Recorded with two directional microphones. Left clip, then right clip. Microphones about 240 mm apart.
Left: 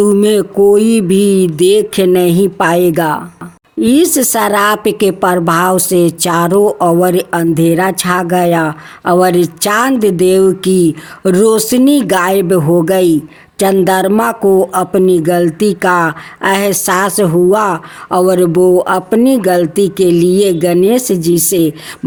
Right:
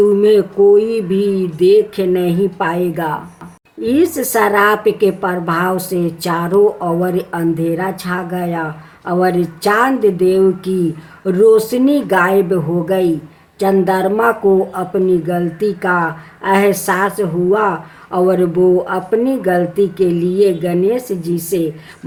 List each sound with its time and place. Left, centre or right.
0.1 s speech: left